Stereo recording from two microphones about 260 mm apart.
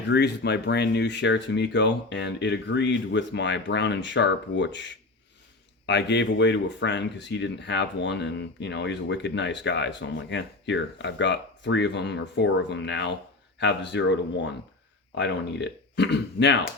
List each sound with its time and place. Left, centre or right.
0.1 s speech: left